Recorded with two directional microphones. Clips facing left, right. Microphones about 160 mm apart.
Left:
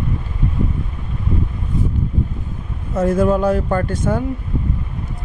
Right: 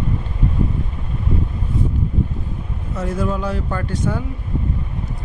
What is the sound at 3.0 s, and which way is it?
Speech, 50° left (ahead or behind).